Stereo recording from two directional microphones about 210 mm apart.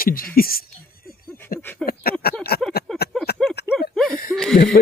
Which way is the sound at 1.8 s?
45° left (ahead or behind).